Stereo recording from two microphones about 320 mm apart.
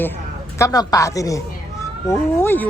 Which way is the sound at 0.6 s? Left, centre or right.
Centre.